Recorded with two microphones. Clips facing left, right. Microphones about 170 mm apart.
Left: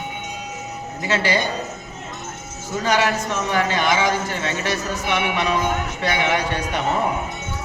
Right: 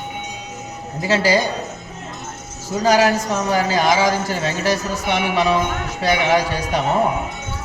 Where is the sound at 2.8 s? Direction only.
35° right (ahead or behind).